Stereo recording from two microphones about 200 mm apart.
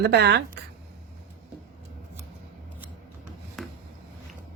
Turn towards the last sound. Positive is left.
turn(degrees=0)  # may be behind; listen again after turning